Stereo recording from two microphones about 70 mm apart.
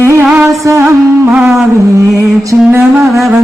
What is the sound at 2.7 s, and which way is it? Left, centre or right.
Music, right.